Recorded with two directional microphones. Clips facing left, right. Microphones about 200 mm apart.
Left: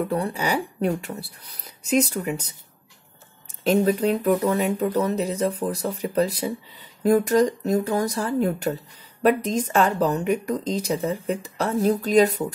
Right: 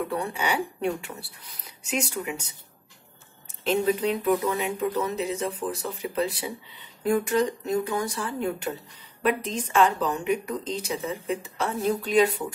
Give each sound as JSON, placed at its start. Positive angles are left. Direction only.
{"t": 0.1, "sound": "speech", "side_deg": 35}
{"t": 3.6, "sound": "speech", "side_deg": 40}